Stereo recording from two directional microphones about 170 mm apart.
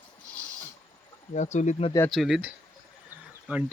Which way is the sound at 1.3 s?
45° left (ahead or behind).